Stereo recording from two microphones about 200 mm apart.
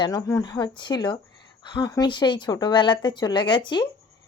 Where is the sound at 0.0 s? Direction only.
20° left (ahead or behind).